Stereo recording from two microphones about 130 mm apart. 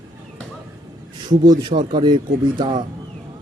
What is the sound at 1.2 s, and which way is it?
Speech, 35° right (ahead or behind).